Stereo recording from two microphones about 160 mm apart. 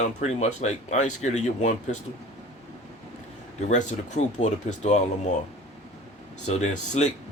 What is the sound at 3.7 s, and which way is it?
Speech, 50° left (ahead or behind).